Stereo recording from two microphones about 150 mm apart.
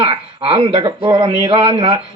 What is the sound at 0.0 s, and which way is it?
A man's voice, 35° right (ahead or behind).